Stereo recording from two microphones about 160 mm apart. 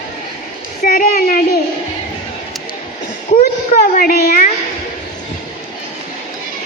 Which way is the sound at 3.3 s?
60° left (ahead or behind).